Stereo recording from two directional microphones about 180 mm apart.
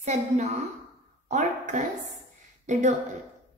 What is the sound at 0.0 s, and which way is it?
Speech, 40° right (ahead or behind).